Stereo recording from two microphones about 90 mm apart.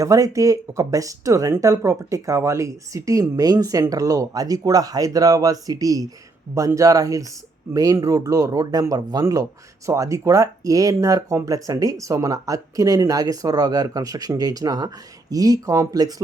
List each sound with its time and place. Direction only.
0.0 s speech: 40° right (ahead or behind)